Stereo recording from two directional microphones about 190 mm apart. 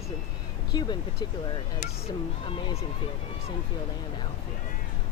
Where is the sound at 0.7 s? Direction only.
20° left (ahead or behind).